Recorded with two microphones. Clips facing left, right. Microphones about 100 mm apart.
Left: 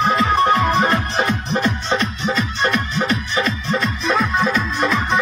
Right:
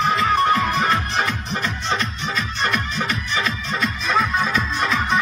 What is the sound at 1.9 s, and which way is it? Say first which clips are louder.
Music: left 3 dB; centre (ahead or behind).